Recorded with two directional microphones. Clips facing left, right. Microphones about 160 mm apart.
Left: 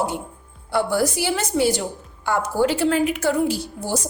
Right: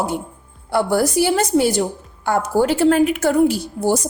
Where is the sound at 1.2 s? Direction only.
45° right (ahead or behind).